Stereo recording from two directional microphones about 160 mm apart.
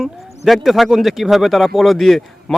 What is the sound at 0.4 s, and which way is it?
Speech, centre (ahead or behind).